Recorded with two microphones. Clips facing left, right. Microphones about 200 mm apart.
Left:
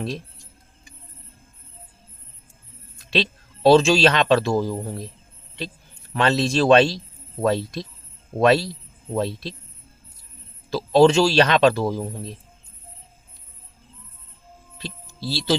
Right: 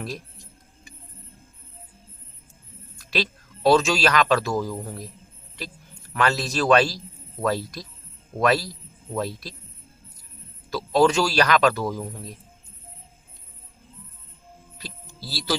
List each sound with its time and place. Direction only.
3.0 s a man's voice: 25° left (ahead or behind)
10.7 s a man's voice: 30° left (ahead or behind)
14.8 s a man's voice: 25° left (ahead or behind)